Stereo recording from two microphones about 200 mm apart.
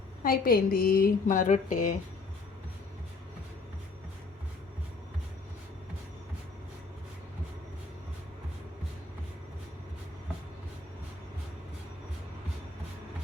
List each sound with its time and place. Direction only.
0.2 s a woman's voice: 45° left (ahead or behind)